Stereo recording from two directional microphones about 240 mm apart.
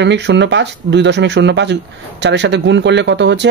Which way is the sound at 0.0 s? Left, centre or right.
Right.